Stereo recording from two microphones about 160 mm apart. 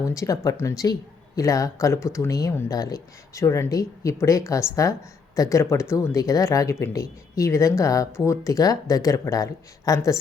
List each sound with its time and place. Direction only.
0.0 s speech: 20° left (ahead or behind)